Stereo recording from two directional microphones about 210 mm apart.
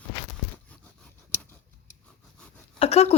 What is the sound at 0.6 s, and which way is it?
Scissors, 5° left (ahead or behind).